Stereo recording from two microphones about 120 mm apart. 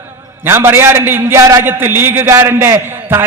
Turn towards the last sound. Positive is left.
turn(degrees=-20)  # may be behind; listen again after turning